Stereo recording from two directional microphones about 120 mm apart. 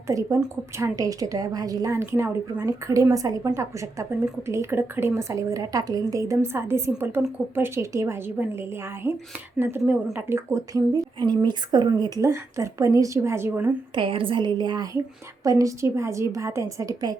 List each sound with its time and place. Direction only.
0.1 s a woman's voice: 25° right (ahead or behind)
13.9 s a woman's voice: 45° right (ahead or behind)